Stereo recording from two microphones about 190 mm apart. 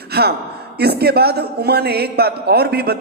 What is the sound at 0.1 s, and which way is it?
A woman's voice, 55° right (ahead or behind).